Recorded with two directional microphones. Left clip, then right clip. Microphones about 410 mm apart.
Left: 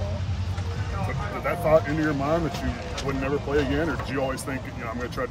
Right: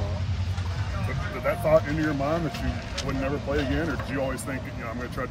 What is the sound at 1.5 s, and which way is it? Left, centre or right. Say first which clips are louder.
Speech: left 1 dB; centre.